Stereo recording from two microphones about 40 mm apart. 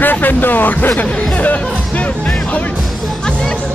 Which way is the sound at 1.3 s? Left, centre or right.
Left.